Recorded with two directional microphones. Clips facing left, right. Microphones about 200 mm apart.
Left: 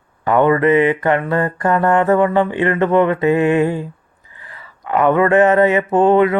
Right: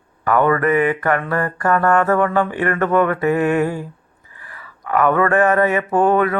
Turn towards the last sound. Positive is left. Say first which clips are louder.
# left 3 dB
turn(degrees=20)  # may be behind; listen again after turning